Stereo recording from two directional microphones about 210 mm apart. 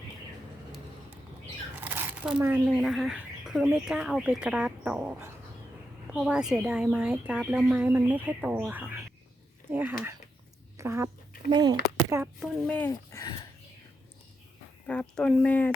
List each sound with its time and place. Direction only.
1.8 s speech: 10° right (ahead or behind)
12.4 s speech: 5° left (ahead or behind)
12.9 s speech: 15° left (ahead or behind)
14.8 s speech: 5° left (ahead or behind)